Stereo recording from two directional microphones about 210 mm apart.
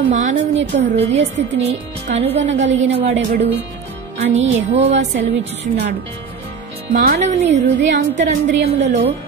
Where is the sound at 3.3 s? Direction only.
30° right (ahead or behind).